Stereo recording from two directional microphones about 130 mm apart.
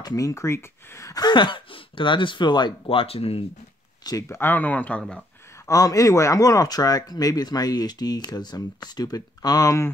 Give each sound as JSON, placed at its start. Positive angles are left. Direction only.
{"t": 0.0, "sound": "speech", "side_deg": 25}
{"t": 4.0, "sound": "speech", "side_deg": 25}
{"t": 5.7, "sound": "speech", "side_deg": 25}